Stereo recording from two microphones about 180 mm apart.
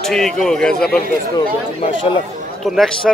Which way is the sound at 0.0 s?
Centre (ahead or behind).